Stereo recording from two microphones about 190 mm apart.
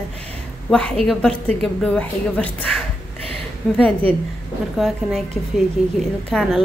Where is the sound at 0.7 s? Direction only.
5° left (ahead or behind).